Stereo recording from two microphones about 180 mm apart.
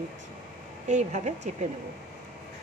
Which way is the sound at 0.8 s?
40° right (ahead or behind).